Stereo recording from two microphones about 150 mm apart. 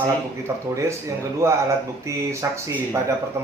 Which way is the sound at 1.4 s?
20° right (ahead or behind).